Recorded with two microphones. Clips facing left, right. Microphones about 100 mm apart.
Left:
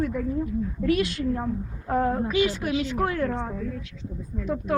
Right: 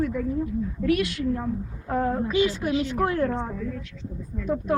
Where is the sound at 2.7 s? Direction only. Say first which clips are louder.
Right 1 dB; 45° right (ahead or behind).